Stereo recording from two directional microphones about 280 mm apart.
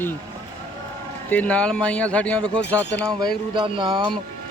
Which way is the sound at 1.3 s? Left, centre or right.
Centre.